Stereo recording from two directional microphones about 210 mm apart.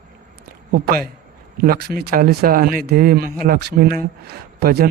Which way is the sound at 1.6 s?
45° right (ahead or behind).